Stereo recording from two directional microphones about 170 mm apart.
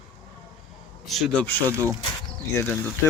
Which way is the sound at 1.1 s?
5° left (ahead or behind).